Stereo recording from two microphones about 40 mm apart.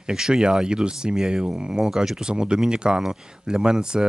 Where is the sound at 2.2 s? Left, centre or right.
Right.